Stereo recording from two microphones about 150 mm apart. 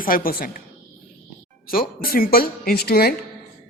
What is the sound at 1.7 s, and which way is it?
A woman's voice, 75° left (ahead or behind).